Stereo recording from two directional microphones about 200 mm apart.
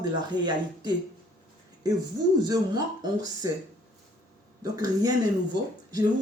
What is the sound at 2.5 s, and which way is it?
Speech, 20° right (ahead or behind).